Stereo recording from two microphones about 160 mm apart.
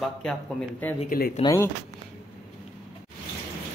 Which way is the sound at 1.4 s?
30° left (ahead or behind).